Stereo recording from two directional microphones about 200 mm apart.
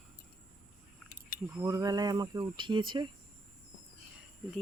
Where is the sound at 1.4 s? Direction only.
10° right (ahead or behind).